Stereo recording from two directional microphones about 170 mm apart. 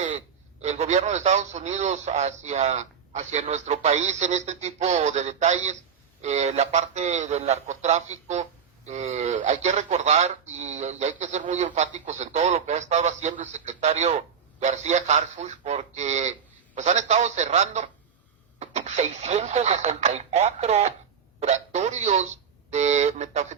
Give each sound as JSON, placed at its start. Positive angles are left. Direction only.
{"t": 0.6, "sound": "speech", "side_deg": -40}